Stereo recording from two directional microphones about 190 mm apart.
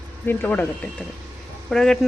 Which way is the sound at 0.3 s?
10° left (ahead or behind).